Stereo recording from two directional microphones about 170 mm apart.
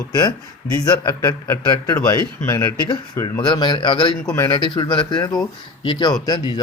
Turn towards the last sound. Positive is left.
turn(degrees=25)  # may be behind; listen again after turning